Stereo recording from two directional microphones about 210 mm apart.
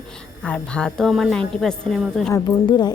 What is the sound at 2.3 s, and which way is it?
Speech, 20° left (ahead or behind).